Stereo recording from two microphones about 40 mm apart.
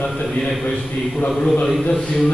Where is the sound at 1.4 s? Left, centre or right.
Centre.